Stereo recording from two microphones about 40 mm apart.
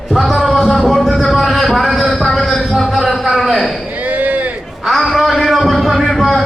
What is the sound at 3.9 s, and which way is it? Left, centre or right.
Chop, right.